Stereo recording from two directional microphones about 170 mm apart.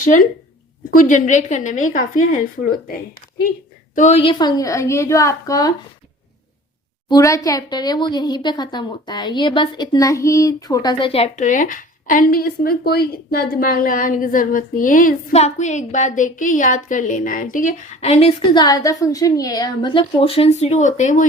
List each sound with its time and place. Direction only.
0.9 s a woman's voice: 50° left (ahead or behind)
3.9 s a woman's voice: 40° left (ahead or behind); by 5.7 s 20° left (ahead or behind)
7.1 s a woman's voice: 20° left (ahead or behind); by 21.2 s 45° left (ahead or behind)